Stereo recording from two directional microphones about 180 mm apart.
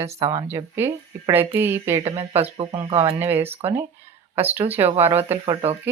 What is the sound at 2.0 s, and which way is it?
Speech, 35° right (ahead or behind).